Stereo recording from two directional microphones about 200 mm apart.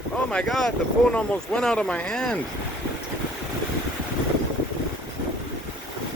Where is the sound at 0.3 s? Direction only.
5° left (ahead or behind).